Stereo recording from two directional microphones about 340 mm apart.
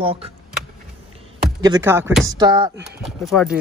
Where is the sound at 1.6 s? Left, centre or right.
Centre.